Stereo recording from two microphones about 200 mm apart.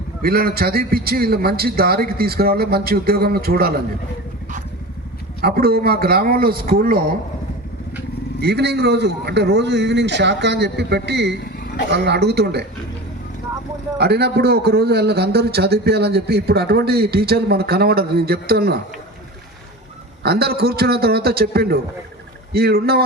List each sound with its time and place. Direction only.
0.2 s a man's voice: 50° right (ahead or behind)
5.4 s a man's voice: 50° right (ahead or behind)
8.4 s a man's voice: 55° right (ahead or behind)
14.0 s a man's voice: 55° right (ahead or behind)
20.2 s a man's voice: 50° right (ahead or behind)